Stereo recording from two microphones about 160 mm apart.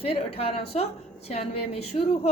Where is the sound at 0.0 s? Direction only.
35° left (ahead or behind).